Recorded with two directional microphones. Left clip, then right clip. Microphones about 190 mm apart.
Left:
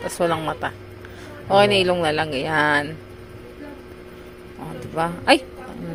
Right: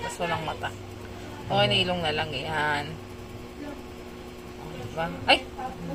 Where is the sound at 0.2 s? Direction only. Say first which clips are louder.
Left 9 dB; 50° left (ahead or behind).